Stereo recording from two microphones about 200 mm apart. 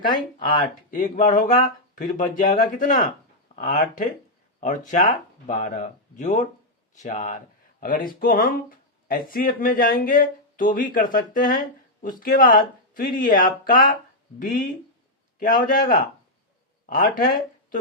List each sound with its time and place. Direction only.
0.6 s speech: 40° left (ahead or behind)
5.5 s speech: 40° left (ahead or behind)